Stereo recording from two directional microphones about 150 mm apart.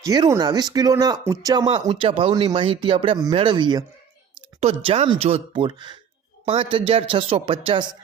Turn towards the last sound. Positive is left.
turn(degrees=-40)  # may be behind; listen again after turning